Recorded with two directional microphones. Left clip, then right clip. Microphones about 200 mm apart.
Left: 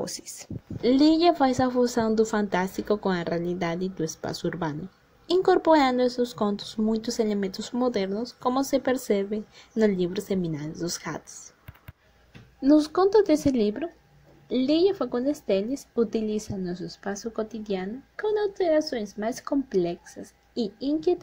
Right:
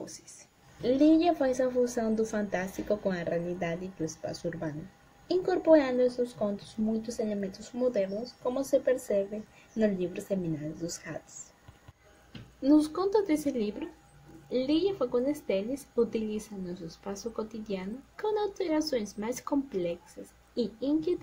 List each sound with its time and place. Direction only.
0.8 s speech: 35° left (ahead or behind)
12.6 s a woman's voice: 30° left (ahead or behind)